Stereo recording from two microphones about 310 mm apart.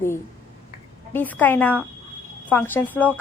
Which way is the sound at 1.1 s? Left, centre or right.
Centre.